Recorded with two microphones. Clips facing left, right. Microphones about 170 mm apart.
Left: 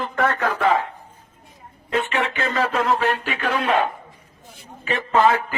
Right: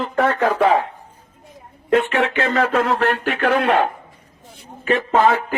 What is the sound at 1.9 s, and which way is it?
Speech, 65° right (ahead or behind).